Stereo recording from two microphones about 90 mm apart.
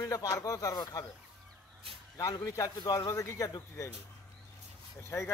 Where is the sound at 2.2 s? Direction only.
35° left (ahead or behind).